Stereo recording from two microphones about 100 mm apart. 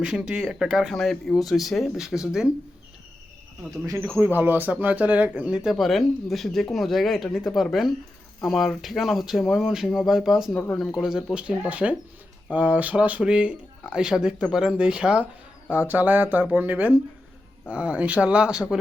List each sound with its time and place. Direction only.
0.0 s speech: 5° right (ahead or behind)
4.2 s speech: 20° right (ahead or behind)
5.7 s speech: centre (ahead or behind)
10.5 s speech: 20° left (ahead or behind)
10.9 s speech: 5° right (ahead or behind)